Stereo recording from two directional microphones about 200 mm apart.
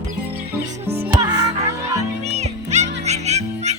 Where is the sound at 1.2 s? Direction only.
20° right (ahead or behind).